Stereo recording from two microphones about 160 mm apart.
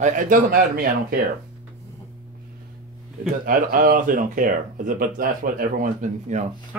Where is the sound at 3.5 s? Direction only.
60° right (ahead or behind).